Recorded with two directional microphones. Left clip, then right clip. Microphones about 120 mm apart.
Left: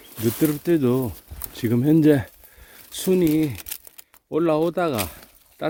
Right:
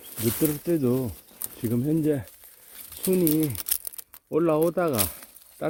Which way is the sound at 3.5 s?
5° right (ahead or behind).